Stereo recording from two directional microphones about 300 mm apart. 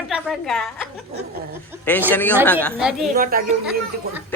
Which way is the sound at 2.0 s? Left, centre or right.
Centre.